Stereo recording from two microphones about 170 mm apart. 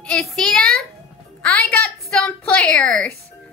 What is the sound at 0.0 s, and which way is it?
A child's voice, 5° left (ahead or behind).